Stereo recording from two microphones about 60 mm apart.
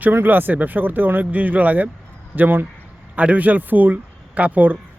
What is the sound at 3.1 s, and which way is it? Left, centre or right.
Speech, right.